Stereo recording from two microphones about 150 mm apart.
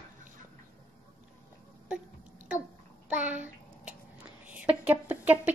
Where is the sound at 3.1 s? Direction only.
10° right (ahead or behind).